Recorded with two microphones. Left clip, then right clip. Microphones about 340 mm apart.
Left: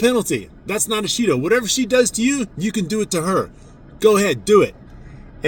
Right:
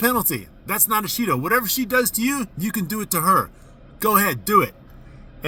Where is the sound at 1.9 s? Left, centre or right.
Right.